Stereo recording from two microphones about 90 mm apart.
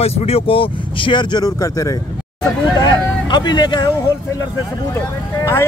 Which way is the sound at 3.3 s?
60° left (ahead or behind).